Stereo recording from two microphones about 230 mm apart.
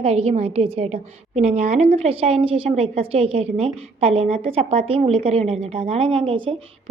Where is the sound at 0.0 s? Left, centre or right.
Right.